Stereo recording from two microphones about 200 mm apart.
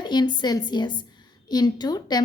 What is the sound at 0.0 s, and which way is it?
A woman's voice, 20° left (ahead or behind).